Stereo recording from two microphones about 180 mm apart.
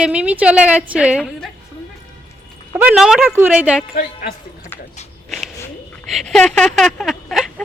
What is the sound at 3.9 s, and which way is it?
Speech, 50° left (ahead or behind).